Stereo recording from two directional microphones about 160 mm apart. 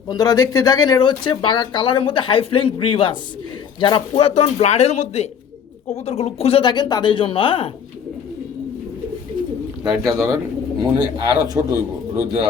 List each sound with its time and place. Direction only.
0.1 s speech: 25° left (ahead or behind)
9.8 s speech: centre (ahead or behind)
10.2 s a man's voice: 15° right (ahead or behind)
11.4 s a man's voice: 20° right (ahead or behind)